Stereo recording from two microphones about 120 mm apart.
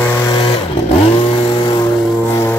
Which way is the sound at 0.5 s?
55° left (ahead or behind).